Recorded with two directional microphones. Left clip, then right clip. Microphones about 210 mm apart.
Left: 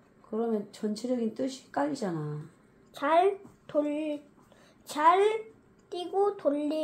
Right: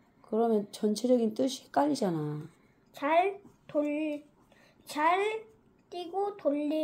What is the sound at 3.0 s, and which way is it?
A woman's voice, 10° left (ahead or behind).